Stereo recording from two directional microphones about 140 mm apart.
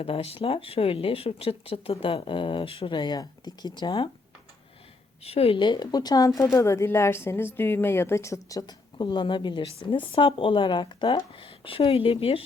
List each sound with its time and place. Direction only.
0.0 s speech: 45° left (ahead or behind)
5.2 s speech: 45° left (ahead or behind)